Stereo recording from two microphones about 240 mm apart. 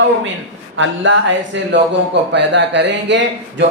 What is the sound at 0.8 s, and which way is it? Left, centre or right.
A man's voice, right.